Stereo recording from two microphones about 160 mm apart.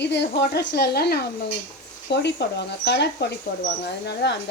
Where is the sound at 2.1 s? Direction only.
90° left.